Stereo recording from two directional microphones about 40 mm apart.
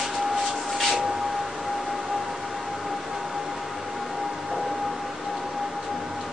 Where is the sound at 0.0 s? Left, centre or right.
Centre.